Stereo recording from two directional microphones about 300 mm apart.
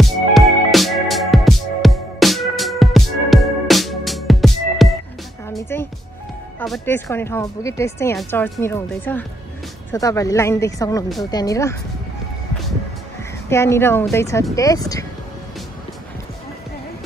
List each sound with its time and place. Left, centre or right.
0.0 s music: centre
6.6 s speech: centre
13.5 s speech: centre